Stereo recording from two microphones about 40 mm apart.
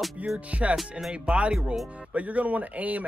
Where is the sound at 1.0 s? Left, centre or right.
Right.